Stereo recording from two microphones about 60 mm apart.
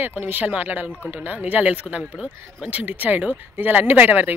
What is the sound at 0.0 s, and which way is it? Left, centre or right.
Speech, right.